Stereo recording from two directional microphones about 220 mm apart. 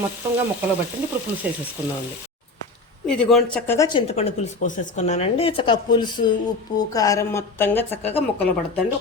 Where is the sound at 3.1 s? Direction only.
Centre (ahead or behind).